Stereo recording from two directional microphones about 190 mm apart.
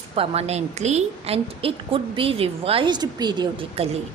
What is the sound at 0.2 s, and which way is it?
A woman's voice, 35° right (ahead or behind).